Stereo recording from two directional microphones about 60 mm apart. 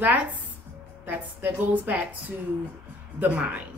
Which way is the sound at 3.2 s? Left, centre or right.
Right.